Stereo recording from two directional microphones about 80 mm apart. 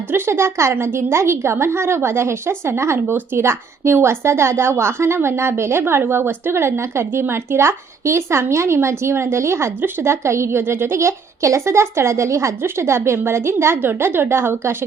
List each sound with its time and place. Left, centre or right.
0.1 s a woman's voice: right